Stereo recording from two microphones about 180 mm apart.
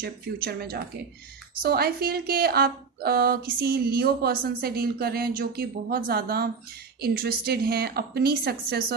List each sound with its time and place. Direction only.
0.0 s a woman's voice: 60° right (ahead or behind)